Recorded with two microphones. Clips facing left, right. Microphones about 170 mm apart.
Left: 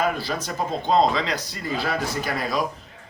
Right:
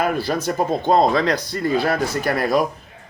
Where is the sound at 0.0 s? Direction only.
50° right (ahead or behind).